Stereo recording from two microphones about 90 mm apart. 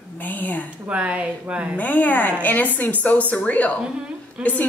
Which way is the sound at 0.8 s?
15° right (ahead or behind).